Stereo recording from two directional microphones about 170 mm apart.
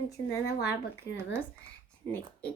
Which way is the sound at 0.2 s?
20° left (ahead or behind).